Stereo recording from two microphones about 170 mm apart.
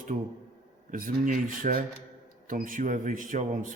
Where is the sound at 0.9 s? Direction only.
50° right (ahead or behind).